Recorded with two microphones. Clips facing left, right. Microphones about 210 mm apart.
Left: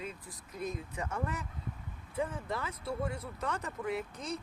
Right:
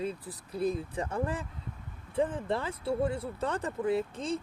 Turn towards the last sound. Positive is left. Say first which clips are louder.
# right 7 dB
turn(degrees=-30)  # may be behind; listen again after turning